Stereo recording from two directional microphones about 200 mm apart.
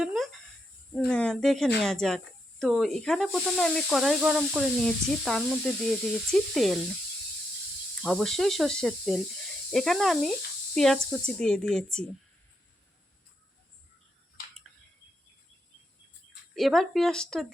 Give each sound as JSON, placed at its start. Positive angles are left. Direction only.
{"t": 0.0, "sound": "a sound", "side_deg": 0}
{"t": 0.9, "sound": "speech", "side_deg": 5}
{"t": 8.0, "sound": "speech", "side_deg": 0}
{"t": 16.6, "sound": "speech", "side_deg": 0}